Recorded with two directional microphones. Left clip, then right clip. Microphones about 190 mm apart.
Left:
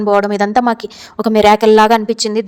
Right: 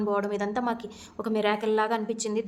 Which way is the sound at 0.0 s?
50° left (ahead or behind).